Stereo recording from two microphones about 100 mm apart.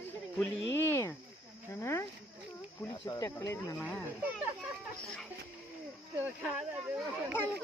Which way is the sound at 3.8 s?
15° left (ahead or behind).